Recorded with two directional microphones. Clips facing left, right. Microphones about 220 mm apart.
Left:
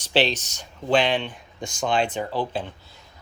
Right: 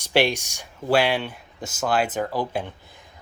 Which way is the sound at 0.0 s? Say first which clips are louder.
Right 1 dB; 10° right (ahead or behind).